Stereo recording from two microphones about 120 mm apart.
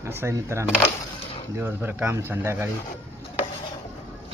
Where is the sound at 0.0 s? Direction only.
20° right (ahead or behind).